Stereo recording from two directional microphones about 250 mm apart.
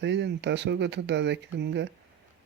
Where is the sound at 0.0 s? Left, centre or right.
Right.